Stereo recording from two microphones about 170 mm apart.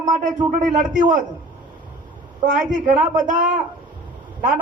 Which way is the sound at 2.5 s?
50° right (ahead or behind).